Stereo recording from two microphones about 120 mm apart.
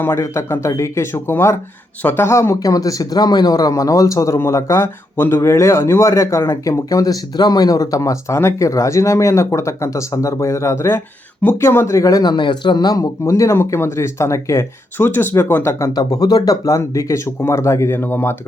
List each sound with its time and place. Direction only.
0.0 s speech: 25° left (ahead or behind)